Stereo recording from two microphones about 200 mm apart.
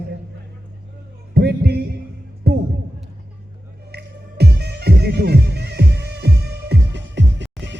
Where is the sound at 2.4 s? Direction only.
55° right (ahead or behind).